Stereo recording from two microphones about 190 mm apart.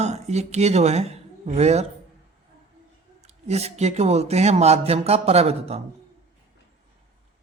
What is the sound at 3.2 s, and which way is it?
Speech, 35° right (ahead or behind).